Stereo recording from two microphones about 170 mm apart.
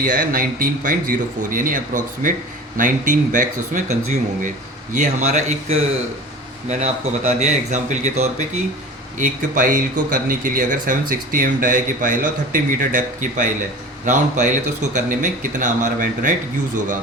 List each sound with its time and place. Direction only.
0.0 s a man's voice: 55° right (ahead or behind)
4.9 s a man's voice: 45° right (ahead or behind)